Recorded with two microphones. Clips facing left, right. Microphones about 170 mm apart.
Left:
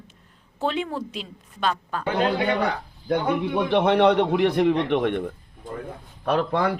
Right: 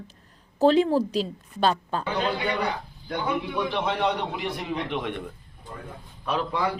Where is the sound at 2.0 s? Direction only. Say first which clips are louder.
Left 8 dB; 60° left (ahead or behind).